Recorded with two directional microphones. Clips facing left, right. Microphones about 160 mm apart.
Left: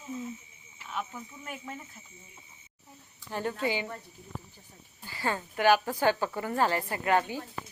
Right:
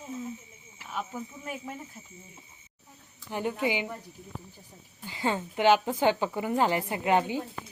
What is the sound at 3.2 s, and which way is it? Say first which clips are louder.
Speech: right 2 dB; 15° right (ahead or behind).